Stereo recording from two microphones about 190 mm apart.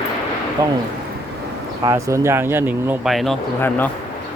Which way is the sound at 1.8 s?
15° right (ahead or behind).